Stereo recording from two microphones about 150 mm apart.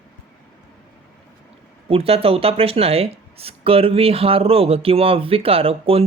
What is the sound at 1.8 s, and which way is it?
Speech, 40° right (ahead or behind).